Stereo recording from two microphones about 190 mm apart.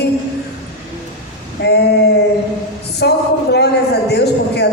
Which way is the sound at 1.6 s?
60° left (ahead or behind).